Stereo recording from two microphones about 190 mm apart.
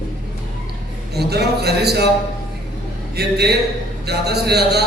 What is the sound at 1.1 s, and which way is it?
Speech, 60° right (ahead or behind).